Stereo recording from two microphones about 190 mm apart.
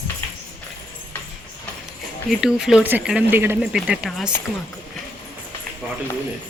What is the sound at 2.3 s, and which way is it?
Speech, centre (ahead or behind).